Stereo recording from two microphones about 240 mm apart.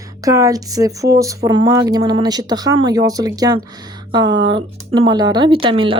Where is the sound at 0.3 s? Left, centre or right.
Centre.